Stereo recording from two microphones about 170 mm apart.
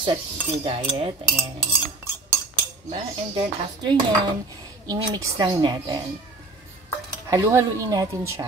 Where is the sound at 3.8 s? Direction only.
25° right (ahead or behind).